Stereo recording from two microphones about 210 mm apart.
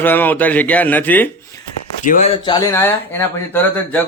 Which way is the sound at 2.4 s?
10° left (ahead or behind).